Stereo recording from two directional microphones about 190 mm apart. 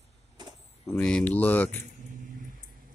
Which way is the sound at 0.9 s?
5° left (ahead or behind).